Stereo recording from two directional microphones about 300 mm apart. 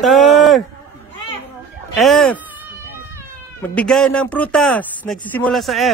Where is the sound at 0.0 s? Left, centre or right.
Centre.